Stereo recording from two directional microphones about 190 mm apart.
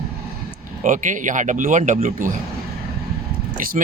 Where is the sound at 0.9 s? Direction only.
40° right (ahead or behind).